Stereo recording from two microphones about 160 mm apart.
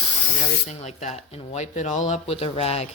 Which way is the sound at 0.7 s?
45° left (ahead or behind).